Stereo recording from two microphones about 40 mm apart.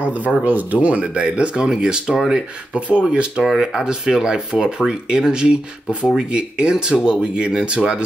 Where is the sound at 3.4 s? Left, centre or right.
Centre.